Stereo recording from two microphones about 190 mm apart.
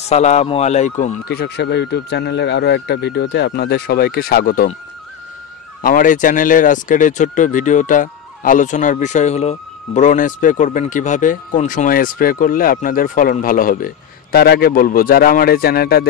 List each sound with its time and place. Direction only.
0.1 s speech: 35° left (ahead or behind); by 4.6 s 50° left (ahead or behind)
5.8 s speech: 45° left (ahead or behind)